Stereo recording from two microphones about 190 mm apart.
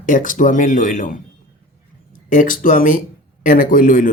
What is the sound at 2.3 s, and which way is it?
Speech, 45° left (ahead or behind).